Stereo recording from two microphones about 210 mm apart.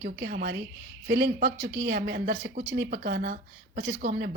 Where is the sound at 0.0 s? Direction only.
50° right (ahead or behind).